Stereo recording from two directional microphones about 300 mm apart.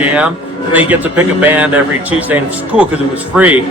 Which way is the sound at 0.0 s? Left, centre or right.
Centre.